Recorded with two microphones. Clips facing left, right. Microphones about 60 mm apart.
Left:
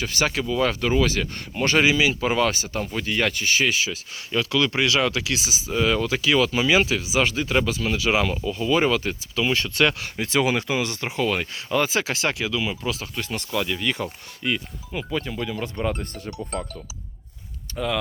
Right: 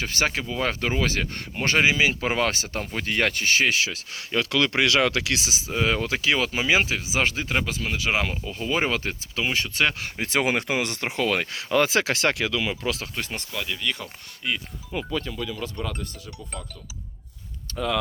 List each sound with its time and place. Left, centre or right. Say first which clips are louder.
0.0 s speech: left 2 dB; right
5.7 s speech: left 3 dB; right
9.4 s speech: left 3 dB; centre
10.2 s speech: left 2 dB; right
13.5 s speech: left 9 dB; centre
13.7 s speech: left 4 dB; centre
14.4 s speech: left 3 dB; centre
15.1 s speech: left 4 dB; centre
16.5 s speech: left 9 dB; left
17.7 s speech: even; centre